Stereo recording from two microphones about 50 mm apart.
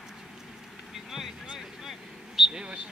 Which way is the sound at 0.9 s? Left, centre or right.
Centre.